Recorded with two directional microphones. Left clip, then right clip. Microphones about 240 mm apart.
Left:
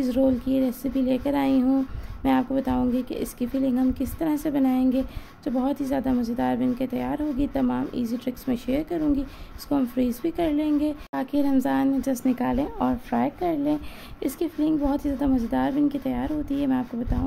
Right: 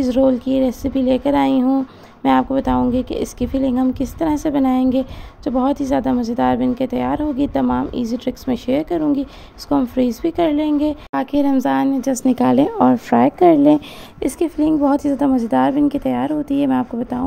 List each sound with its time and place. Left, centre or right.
0.0 s speech: centre